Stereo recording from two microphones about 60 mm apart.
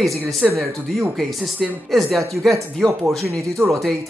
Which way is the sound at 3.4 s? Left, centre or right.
Right.